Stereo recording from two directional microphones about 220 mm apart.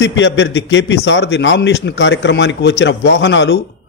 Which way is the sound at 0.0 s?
55° left (ahead or behind).